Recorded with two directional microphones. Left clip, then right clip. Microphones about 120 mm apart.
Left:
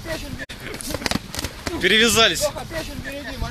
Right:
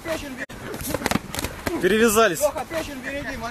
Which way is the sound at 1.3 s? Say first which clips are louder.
Right 1 dB; 10° right (ahead or behind).